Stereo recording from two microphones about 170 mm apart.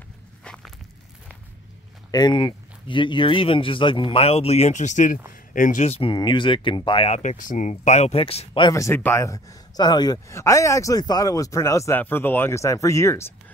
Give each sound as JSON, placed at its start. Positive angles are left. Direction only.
{"t": 0.4, "sound": "walk", "side_deg": 5}
{"t": 2.0, "sound": "speech", "side_deg": 25}